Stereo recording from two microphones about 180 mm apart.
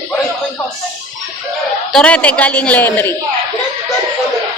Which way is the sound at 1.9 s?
5° left (ahead or behind).